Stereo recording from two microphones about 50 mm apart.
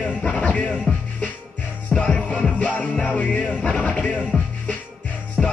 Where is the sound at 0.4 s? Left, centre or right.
Left.